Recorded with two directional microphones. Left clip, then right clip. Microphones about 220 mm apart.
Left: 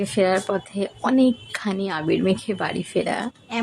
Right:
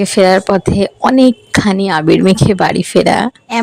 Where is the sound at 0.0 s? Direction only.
40° right (ahead or behind).